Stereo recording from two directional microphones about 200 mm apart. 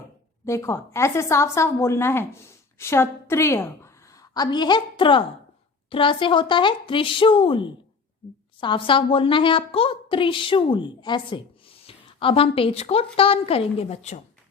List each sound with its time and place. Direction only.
0.4 s a woman's voice: 15° left (ahead or behind); by 14.2 s 30° left (ahead or behind)